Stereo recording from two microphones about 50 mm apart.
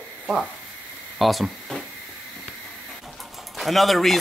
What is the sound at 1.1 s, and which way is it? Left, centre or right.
Speech, centre.